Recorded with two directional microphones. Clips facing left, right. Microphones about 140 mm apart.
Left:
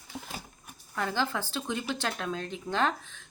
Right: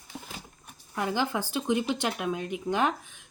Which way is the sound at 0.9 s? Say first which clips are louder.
Right 2 dB; 15° right (ahead or behind).